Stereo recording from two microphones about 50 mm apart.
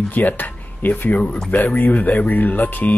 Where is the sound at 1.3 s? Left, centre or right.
Left.